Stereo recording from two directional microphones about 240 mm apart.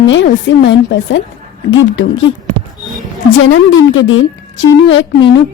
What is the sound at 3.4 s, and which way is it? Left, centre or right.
A woman's voice, left.